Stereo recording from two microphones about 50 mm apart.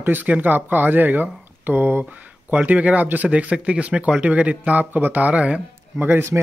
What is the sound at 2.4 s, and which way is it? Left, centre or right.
Speech, right.